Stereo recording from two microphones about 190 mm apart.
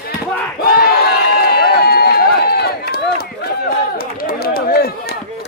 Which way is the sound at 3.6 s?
50° left (ahead or behind).